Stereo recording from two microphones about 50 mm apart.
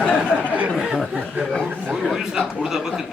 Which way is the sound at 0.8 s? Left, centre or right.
Centre.